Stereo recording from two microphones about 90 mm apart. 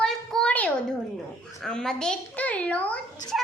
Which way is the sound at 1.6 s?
5° left (ahead or behind).